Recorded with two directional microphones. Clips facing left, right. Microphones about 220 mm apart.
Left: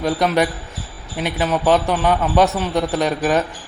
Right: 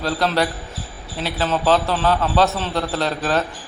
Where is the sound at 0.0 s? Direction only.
20° left (ahead or behind).